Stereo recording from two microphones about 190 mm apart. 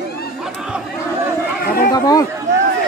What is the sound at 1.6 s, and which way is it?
Chatter, 55° left (ahead or behind).